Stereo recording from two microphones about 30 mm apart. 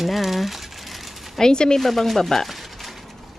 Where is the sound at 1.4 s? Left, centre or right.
Left.